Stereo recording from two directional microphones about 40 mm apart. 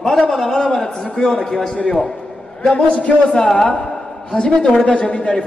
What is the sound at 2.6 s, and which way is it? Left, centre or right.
Speech, left.